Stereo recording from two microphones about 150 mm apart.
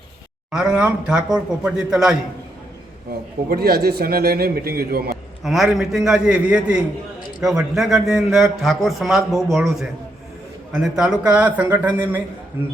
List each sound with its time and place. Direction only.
0.5 s a man's voice: 5° right (ahead or behind)
3.5 s a man's voice: 90° right
5.4 s a man's voice: centre (ahead or behind)